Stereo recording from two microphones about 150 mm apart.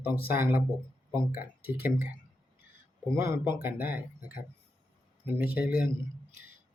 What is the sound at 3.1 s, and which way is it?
Speech, 20° right (ahead or behind).